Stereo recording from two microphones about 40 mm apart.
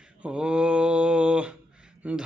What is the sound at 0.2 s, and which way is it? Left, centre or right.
Mantra, right.